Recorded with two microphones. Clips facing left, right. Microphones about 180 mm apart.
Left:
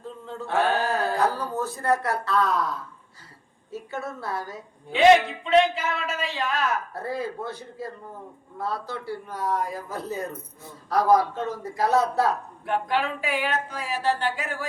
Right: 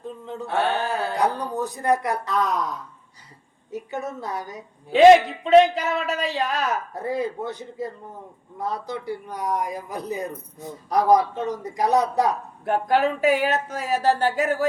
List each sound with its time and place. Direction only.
0.0 s a sound: 20° right (ahead or behind)
0.4 s a sound: centre (ahead or behind)
1.1 s a man's voice: 15° right (ahead or behind)
5.5 s speech: 40° right (ahead or behind)
6.9 s a man's voice: 20° right (ahead or behind)
12.6 s speech: 40° right (ahead or behind)